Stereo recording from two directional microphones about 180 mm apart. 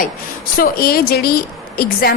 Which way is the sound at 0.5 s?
55° left (ahead or behind).